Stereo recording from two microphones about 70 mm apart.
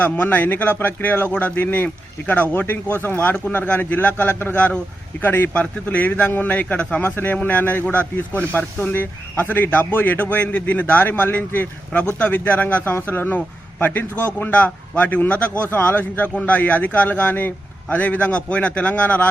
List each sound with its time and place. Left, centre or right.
0.0 s a man's voice: left
7.0 s a man's voice: left